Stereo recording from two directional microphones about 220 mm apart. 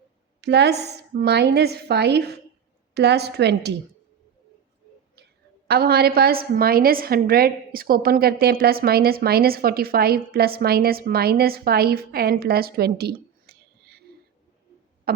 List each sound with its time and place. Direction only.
0.4 s a woman's voice: 50° right (ahead or behind)
5.1 s a woman's voice: 45° right (ahead or behind)